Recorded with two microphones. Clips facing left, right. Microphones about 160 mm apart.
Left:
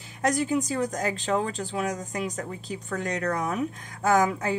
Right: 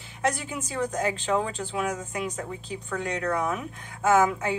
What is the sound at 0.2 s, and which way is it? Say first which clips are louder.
A woman's voice: left 4 dB; 40° left (ahead or behind).